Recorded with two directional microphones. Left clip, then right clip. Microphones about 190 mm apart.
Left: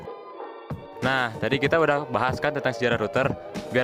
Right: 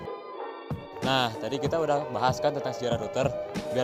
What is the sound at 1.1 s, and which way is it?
Speech, 45° left (ahead or behind).